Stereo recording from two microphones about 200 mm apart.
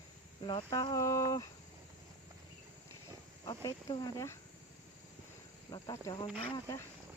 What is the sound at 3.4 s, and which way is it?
Speech, 20° left (ahead or behind).